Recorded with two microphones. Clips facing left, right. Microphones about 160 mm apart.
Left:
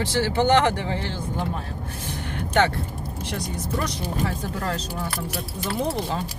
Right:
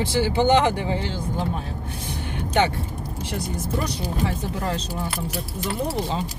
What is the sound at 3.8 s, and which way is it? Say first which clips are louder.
Speech: even; 20° right (ahead or behind).